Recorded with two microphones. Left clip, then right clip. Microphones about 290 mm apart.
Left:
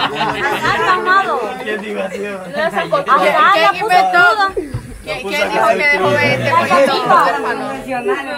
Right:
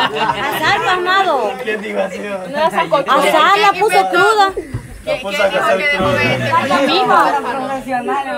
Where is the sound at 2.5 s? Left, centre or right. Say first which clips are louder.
Right 2 dB; right.